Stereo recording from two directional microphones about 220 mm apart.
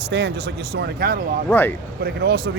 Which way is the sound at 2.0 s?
45° right (ahead or behind).